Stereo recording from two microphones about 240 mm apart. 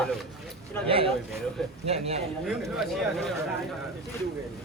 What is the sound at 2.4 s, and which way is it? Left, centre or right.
Speech, centre.